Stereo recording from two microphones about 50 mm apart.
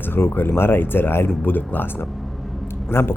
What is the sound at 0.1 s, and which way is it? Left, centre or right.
Speech, left.